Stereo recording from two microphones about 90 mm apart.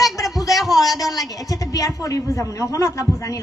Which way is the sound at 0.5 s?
Centre (ahead or behind).